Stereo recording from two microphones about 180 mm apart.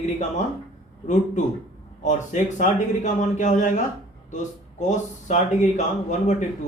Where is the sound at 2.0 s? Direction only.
45° left (ahead or behind).